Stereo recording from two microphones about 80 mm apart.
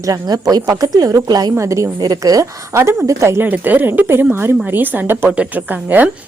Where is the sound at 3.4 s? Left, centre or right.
Right.